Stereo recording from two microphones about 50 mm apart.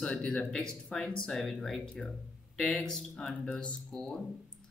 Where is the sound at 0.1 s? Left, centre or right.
Left.